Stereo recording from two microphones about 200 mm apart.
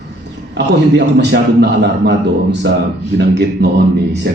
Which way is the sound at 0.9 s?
60° right (ahead or behind).